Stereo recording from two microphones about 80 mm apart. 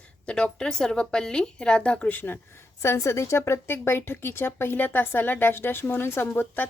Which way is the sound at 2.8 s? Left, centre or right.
Left.